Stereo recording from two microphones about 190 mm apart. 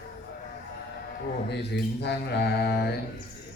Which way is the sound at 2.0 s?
60° left (ahead or behind).